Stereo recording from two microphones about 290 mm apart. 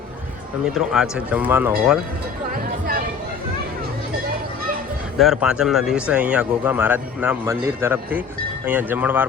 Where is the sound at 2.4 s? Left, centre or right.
Right.